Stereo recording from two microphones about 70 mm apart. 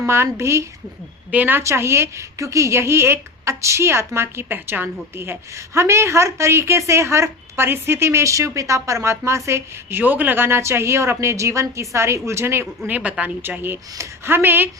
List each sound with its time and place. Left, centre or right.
0.0 s speech: right
1.3 s speech: right
1.6 s speech: right
10.0 s speech: right
12.9 s speech: centre
14.0 s speech: right